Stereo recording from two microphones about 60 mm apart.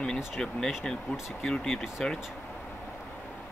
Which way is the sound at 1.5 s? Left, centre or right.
Centre.